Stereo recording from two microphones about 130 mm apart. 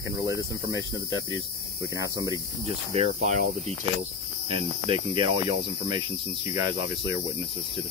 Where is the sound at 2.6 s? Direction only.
55° right (ahead or behind).